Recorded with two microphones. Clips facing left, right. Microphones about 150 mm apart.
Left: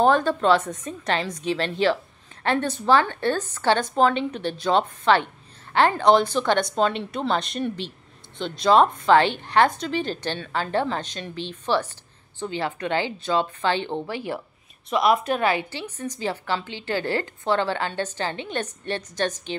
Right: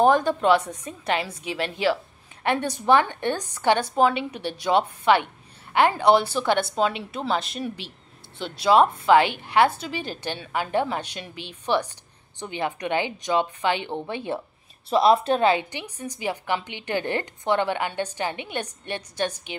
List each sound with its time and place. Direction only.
0.0 s a woman's voice: 15° right (ahead or behind)